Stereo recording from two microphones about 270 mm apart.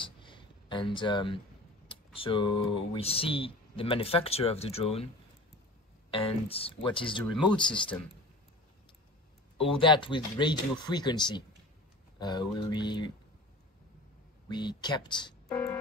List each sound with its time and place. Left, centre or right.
0.0 s a sound: centre
1.9 s speech: centre
6.0 s speech: left
9.6 s speech: centre
14.5 s speech: centre